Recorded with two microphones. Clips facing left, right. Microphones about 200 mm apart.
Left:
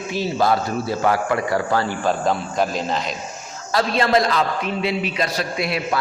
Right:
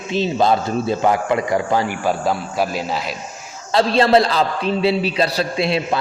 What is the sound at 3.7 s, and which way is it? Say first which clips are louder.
A man's voice: right 4 dB; 30° right (ahead or behind).